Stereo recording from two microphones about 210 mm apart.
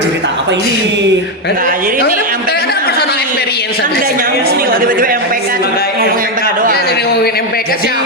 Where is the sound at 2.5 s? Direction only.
50° left (ahead or behind).